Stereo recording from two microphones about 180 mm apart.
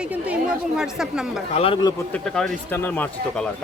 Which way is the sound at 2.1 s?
5° left (ahead or behind).